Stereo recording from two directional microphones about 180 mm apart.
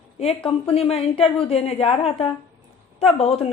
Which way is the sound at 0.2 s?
35° left (ahead or behind).